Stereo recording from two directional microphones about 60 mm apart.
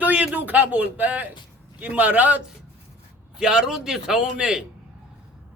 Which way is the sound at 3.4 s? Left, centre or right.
Centre.